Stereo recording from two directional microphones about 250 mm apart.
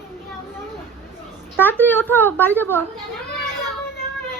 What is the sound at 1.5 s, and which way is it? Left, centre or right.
A woman's voice, centre.